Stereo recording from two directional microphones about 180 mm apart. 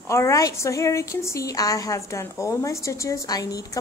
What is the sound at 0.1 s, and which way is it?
Speech, 15° left (ahead or behind).